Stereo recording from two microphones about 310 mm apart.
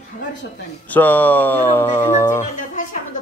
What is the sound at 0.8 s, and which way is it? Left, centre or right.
Speech, centre.